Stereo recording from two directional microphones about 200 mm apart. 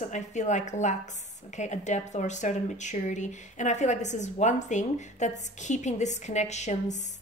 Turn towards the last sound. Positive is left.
turn(degrees=35)  # may be behind; listen again after turning